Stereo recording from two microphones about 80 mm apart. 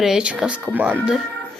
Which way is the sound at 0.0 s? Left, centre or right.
Centre.